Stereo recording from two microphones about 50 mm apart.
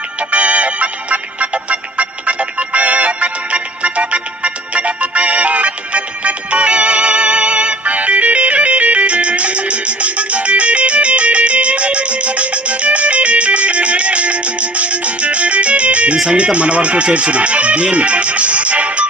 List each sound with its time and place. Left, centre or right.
0.2 s music: right
16.1 s speech: centre